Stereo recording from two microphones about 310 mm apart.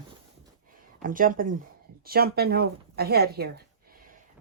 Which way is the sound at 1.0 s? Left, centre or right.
Right.